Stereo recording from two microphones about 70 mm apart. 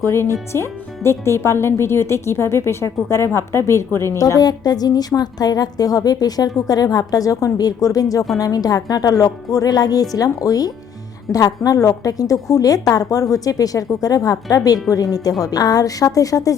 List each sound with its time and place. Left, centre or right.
0.1 s speech: left
4.4 s a woman's voice: left